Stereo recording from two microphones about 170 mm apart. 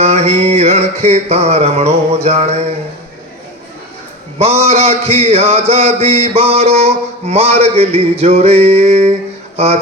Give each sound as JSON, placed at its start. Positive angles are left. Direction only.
{"t": 0.0, "sound": "mantra", "side_deg": -40}
{"t": 4.4, "sound": "mantra", "side_deg": -35}
{"t": 9.6, "sound": "speech", "side_deg": -35}